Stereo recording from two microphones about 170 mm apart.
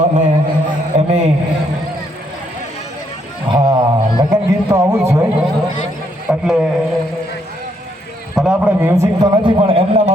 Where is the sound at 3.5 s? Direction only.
30° right (ahead or behind).